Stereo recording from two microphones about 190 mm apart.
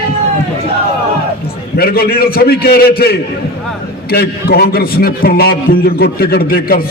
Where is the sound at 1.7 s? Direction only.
55° left (ahead or behind).